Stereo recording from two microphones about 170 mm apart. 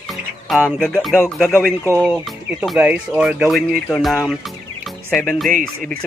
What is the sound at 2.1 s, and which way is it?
Speech, centre (ahead or behind).